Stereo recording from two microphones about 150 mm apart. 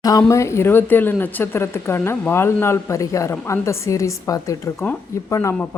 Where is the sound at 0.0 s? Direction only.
25° left (ahead or behind).